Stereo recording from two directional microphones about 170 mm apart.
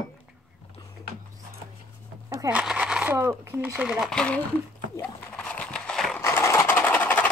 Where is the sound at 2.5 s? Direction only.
5° right (ahead or behind).